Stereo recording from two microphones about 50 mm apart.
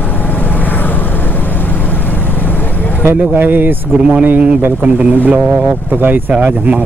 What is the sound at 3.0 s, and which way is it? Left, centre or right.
Speech, right.